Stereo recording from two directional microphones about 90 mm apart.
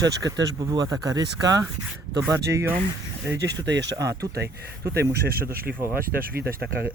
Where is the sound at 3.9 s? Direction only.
40° right (ahead or behind).